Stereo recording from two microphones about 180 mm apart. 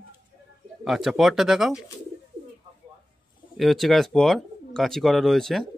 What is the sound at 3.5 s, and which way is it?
Speech, centre (ahead or behind).